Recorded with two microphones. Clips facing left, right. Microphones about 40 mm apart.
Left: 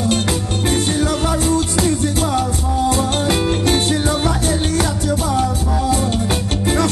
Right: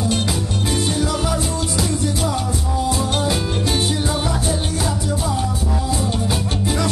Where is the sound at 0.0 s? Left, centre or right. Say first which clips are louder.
Left 3 dB; left.